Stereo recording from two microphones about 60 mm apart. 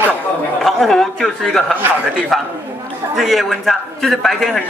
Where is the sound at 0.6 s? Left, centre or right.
Centre.